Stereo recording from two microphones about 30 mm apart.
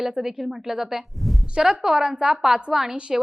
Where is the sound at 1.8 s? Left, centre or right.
Right.